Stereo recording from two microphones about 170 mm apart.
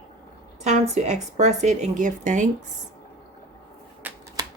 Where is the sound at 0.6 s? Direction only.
40° right (ahead or behind).